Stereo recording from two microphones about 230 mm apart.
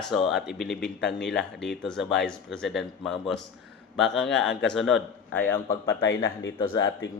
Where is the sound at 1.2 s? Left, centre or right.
Centre.